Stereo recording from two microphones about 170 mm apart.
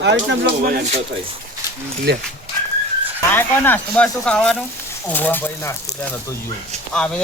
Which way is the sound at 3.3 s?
10° left (ahead or behind).